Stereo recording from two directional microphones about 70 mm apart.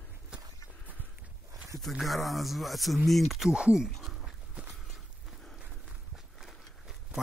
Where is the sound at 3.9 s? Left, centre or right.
Centre.